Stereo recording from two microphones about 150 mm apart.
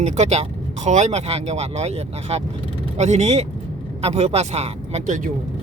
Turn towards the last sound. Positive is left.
turn(degrees=-45)  # may be behind; listen again after turning